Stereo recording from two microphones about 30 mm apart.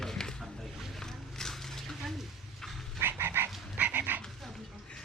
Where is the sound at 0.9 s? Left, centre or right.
Centre.